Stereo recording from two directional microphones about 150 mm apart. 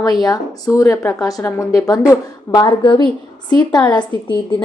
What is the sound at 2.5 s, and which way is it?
A woman's voice, 30° left (ahead or behind).